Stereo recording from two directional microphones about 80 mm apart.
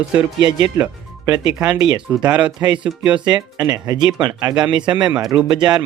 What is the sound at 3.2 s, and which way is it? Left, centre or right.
Speech, right.